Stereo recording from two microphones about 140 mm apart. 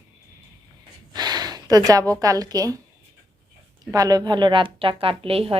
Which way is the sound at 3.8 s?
25° right (ahead or behind).